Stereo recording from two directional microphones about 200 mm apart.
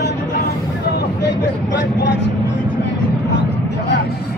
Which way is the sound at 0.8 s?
50° left (ahead or behind).